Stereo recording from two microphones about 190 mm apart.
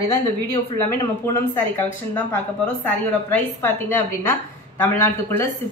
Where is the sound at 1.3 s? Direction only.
10° left (ahead or behind).